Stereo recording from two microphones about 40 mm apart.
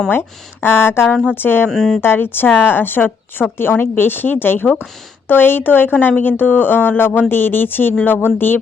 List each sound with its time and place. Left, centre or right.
0.1 s speech: left
1.4 s speech: left
1.7 s speech: centre
2.0 s speech: left